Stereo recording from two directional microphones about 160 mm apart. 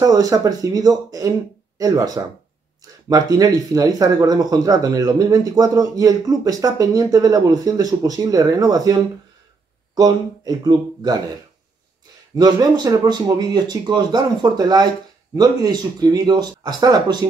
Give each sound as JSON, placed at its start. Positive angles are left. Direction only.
{"t": 0.0, "sound": "speech", "side_deg": -20}
{"t": 12.4, "sound": "speech", "side_deg": -25}